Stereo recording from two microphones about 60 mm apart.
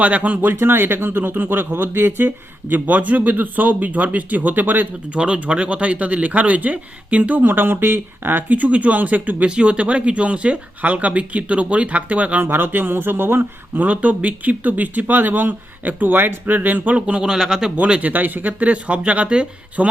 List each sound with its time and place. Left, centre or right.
0.0 s speech: right
0.5 s speech: right
5.1 s speech: centre
12.5 s speech: right; by 18.1 s centre
18.1 s speech: right